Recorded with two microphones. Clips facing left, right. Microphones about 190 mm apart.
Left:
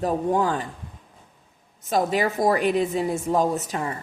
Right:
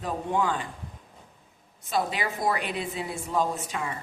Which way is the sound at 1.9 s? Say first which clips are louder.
Left 6 dB; 45° left (ahead or behind).